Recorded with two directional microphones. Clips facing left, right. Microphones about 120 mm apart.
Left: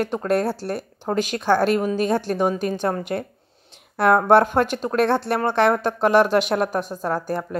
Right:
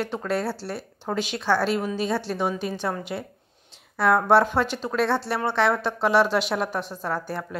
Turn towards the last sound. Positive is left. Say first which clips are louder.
# left 5 dB
turn(degrees=45)  # may be behind; listen again after turning